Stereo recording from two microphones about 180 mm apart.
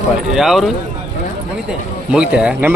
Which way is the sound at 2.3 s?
5° right (ahead or behind).